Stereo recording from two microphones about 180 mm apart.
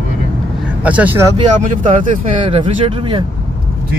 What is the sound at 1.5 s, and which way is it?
Speech, 45° right (ahead or behind).